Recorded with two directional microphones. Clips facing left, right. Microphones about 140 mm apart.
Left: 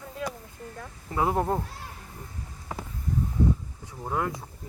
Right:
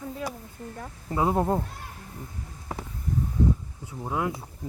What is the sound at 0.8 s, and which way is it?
Speech, 20° right (ahead or behind).